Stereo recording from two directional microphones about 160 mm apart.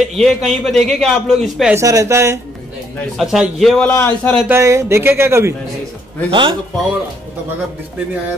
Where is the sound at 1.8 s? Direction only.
20° right (ahead or behind).